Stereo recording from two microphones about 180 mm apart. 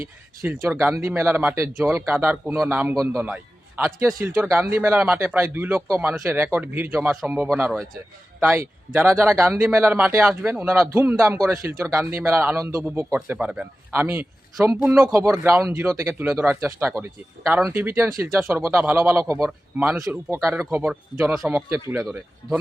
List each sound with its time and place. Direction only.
0.4 s a man's voice: 10° right (ahead or behind)
17.4 s speech: centre (ahead or behind)
17.7 s a man's voice: 10° right (ahead or behind)